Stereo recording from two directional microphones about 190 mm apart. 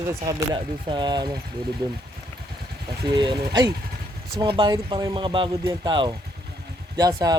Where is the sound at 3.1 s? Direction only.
25° right (ahead or behind).